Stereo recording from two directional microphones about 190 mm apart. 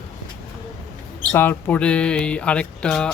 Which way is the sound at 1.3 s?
10° left (ahead or behind).